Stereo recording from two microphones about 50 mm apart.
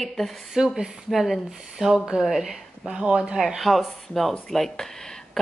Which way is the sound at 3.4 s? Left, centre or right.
Centre.